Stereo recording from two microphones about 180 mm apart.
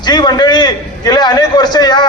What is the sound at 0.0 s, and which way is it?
A man's voice, 25° left (ahead or behind).